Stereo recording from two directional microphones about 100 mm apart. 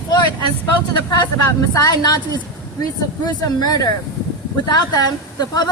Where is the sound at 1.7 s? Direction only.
40° left (ahead or behind).